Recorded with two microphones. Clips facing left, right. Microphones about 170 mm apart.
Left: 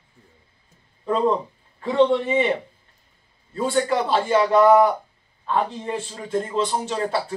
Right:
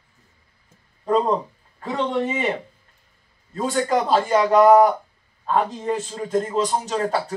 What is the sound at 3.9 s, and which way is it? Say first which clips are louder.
A man's voice: right 1 dB; 40° right (ahead or behind).